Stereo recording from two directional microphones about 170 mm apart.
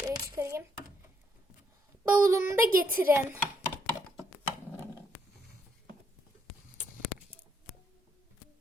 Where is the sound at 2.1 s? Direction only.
15° right (ahead or behind).